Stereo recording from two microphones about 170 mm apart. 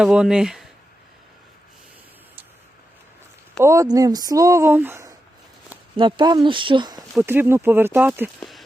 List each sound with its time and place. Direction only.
0.0 s speech: 5° right (ahead or behind)
3.6 s speech: 20° right (ahead or behind)
6.0 s speech: 30° right (ahead or behind)
7.3 s speech: 15° right (ahead or behind)
8.4 s a sound: centre (ahead or behind)